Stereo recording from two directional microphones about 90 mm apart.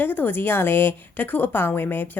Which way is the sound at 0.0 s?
20° left (ahead or behind).